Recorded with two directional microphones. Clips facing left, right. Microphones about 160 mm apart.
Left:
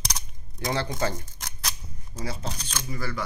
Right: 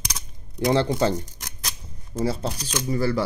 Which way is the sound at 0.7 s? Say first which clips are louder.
Right 7 dB; 25° right (ahead or behind).